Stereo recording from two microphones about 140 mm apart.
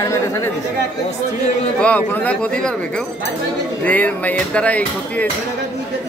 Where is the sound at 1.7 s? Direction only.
10° left (ahead or behind).